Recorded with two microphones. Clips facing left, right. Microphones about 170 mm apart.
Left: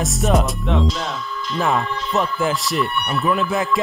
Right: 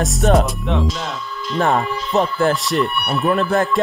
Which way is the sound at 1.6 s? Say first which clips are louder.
Right 3 dB; 35° right (ahead or behind).